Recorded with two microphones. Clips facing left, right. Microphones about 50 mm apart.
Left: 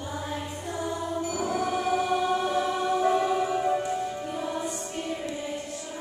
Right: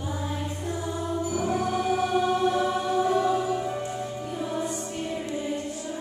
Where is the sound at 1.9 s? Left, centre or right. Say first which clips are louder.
Right 1 dB; centre.